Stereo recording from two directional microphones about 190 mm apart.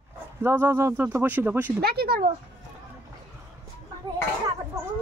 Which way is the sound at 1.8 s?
55° right (ahead or behind).